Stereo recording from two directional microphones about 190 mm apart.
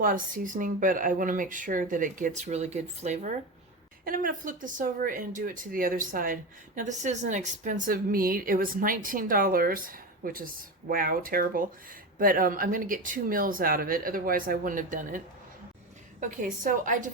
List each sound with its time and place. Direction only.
0.0 s speech: 45° right (ahead or behind)
16.2 s speech: 45° right (ahead or behind)